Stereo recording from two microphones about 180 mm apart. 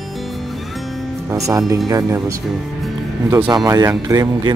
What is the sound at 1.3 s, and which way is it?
Speech, 15° right (ahead or behind).